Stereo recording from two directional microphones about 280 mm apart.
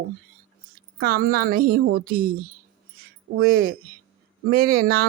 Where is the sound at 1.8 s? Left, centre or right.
Right.